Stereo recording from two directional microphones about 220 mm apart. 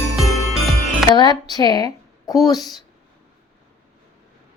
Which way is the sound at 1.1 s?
20° left (ahead or behind).